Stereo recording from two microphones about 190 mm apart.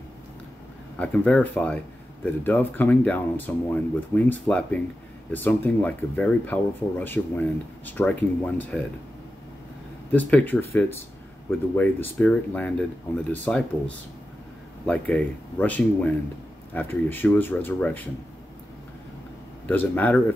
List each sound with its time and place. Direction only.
0.9 s speech: 5° left (ahead or behind)
10.1 s speech: 10° left (ahead or behind)
19.7 s speech: 10° left (ahead or behind)